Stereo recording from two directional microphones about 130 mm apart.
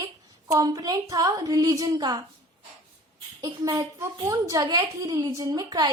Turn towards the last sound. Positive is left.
turn(degrees=-30)  # may be behind; listen again after turning